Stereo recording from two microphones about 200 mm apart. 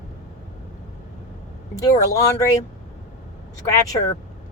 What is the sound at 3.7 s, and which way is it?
Speech, 15° left (ahead or behind).